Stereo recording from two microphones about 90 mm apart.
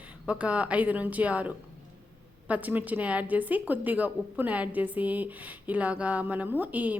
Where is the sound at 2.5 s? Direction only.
20° right (ahead or behind).